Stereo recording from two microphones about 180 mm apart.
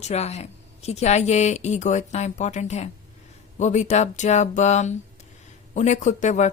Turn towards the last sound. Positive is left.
turn(degrees=40)  # may be behind; listen again after turning